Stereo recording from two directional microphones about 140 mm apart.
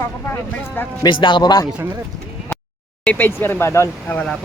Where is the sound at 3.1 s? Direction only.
15° left (ahead or behind).